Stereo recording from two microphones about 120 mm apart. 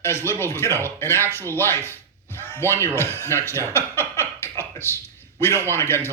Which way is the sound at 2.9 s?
20° left (ahead or behind).